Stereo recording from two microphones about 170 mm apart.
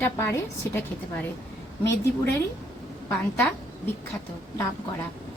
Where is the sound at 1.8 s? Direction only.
15° left (ahead or behind).